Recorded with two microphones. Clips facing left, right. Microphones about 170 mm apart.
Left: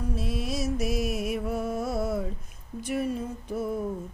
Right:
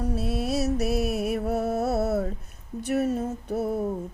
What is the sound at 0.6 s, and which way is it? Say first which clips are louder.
Music: right 1 dB; 65° right (ahead or behind).